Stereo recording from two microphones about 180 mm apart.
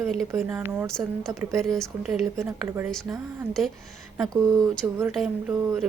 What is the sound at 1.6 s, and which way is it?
Speech, centre (ahead or behind).